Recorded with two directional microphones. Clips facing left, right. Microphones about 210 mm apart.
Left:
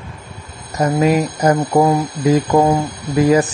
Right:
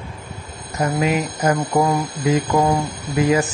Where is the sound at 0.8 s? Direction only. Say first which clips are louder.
Left 5 dB; 35° left (ahead or behind).